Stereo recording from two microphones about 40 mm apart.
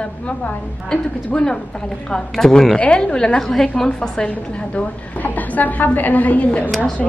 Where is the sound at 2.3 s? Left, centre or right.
Centre.